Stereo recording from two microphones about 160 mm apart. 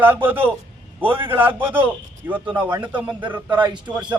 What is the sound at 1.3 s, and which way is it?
A man's voice, 10° right (ahead or behind).